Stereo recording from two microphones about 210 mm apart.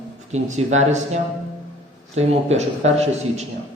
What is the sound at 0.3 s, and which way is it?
A man's voice, 35° right (ahead or behind).